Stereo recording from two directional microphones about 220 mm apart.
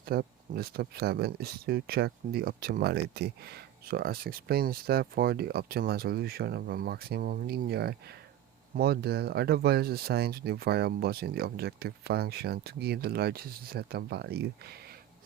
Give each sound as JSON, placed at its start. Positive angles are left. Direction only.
{"t": 0.0, "sound": "speech", "side_deg": -45}